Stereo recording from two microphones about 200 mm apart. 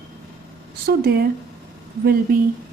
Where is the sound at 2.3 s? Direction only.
45° right (ahead or behind).